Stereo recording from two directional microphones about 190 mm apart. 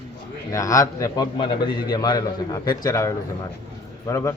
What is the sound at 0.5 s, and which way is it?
A man's voice, 15° left (ahead or behind).